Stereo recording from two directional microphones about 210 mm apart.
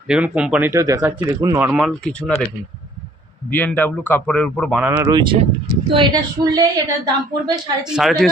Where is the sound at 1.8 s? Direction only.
5° left (ahead or behind).